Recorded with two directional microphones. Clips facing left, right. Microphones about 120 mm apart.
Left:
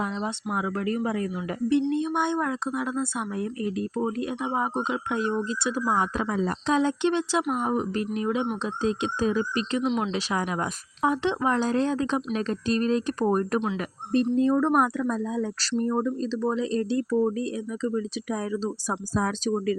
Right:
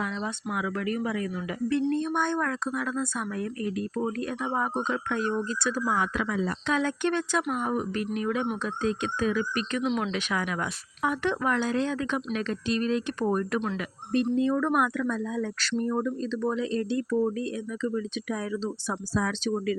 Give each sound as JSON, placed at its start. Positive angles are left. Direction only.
{"t": 0.0, "sound": "speech", "side_deg": 25}
{"t": 1.9, "sound": "speech", "side_deg": 15}
{"t": 9.8, "sound": "speech", "side_deg": 5}
{"t": 10.1, "sound": "speech", "side_deg": 30}